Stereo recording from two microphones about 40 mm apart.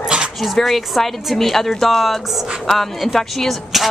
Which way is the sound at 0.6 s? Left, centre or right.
Centre.